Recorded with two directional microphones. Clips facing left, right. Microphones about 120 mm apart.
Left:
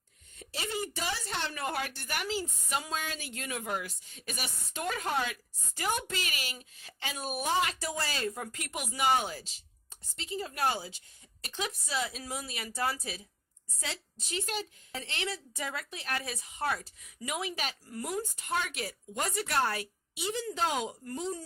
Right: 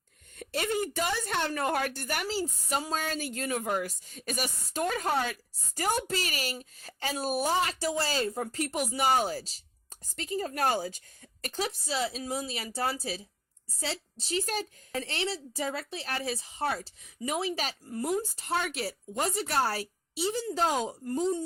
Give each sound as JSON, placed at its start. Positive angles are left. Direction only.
{"t": 0.3, "sound": "a woman's voice", "side_deg": -55}
{"t": 11.6, "sound": "a woman's voice", "side_deg": -30}